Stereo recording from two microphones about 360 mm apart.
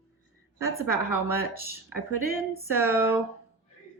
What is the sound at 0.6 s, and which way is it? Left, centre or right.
Speech, left.